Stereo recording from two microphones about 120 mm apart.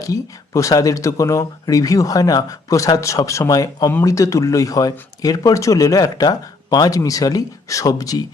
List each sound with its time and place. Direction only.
0.0 s speech: 25° left (ahead or behind)